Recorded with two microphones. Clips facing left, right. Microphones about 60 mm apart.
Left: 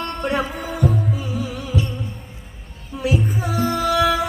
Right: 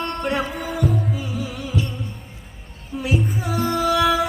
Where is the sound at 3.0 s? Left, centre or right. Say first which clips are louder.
Left 2 dB; centre.